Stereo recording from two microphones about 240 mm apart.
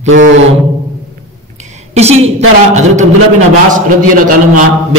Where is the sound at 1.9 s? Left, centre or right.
Right.